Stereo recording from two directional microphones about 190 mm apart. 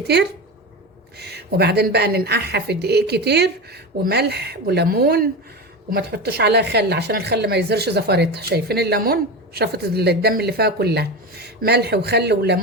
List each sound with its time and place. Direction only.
1.2 s a woman's voice: 60° right (ahead or behind)